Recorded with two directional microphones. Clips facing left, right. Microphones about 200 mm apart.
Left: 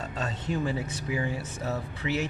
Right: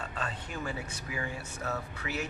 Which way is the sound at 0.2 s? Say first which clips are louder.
Left 9 dB; 20° left (ahead or behind).